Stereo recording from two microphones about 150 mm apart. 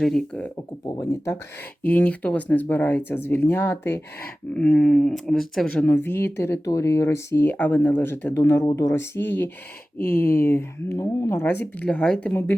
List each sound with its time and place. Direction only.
0.0 s speech: 5° left (ahead or behind)
0.5 s speech: 20° left (ahead or behind)